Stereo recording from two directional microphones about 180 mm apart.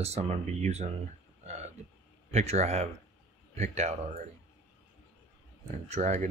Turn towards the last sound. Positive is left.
turn(degrees=-40)  # may be behind; listen again after turning